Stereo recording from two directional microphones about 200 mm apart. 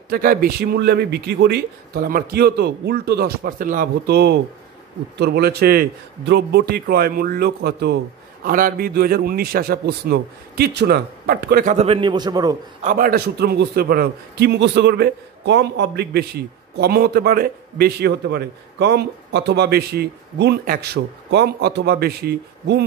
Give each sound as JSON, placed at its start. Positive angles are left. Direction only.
{"t": 0.1, "sound": "a man's voice", "side_deg": -50}
{"t": 12.8, "sound": "a man's voice", "side_deg": -40}